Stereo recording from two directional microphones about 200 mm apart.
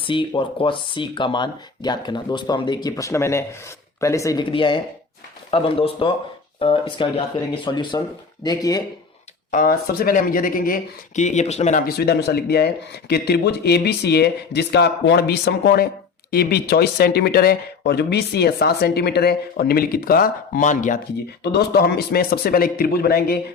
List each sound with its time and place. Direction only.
0.0 s speech: 25° left (ahead or behind)
9.5 s speech: 45° left (ahead or behind)
11.9 s speech: 50° left (ahead or behind)
21.4 s speech: 50° left (ahead or behind)